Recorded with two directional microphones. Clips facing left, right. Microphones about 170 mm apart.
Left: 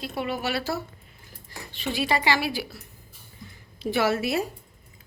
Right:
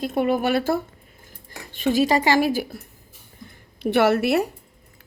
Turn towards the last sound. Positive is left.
turn(degrees=-65)  # may be behind; listen again after turning